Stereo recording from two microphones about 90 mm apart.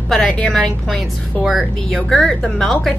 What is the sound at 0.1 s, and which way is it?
A woman's voice, 5° left (ahead or behind).